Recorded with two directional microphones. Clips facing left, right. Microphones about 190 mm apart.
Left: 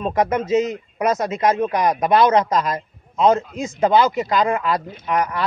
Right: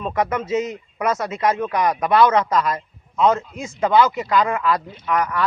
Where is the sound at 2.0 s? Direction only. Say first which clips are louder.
Even; 20° left (ahead or behind).